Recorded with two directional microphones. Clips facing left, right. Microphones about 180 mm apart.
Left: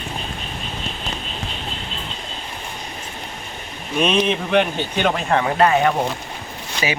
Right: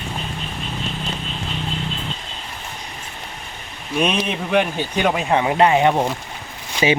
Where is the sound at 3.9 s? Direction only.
5° right (ahead or behind); by 5.9 s 20° right (ahead or behind).